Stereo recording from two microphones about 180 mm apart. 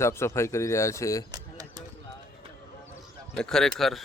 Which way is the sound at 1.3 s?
20° right (ahead or behind).